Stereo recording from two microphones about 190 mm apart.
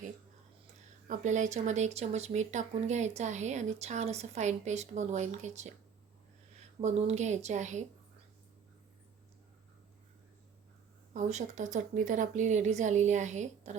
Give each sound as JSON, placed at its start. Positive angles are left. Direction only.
{"t": 1.0, "sound": "speech", "side_deg": -40}
{"t": 6.8, "sound": "speech", "side_deg": -35}
{"t": 11.1, "sound": "speech", "side_deg": -40}